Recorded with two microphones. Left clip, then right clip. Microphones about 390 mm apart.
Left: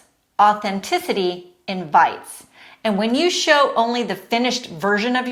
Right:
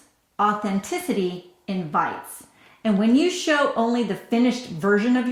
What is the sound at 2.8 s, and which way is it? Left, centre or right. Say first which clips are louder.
Speech: left 2 dB; left.